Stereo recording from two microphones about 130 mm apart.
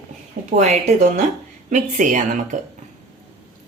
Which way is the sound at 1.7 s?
80° right.